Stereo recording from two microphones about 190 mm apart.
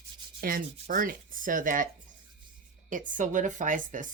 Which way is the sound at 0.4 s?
45° right (ahead or behind).